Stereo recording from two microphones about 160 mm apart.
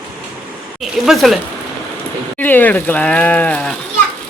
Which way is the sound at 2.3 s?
10° left (ahead or behind).